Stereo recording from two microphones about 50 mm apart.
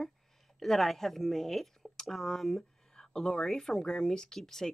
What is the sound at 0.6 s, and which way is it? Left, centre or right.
A woman's voice, centre.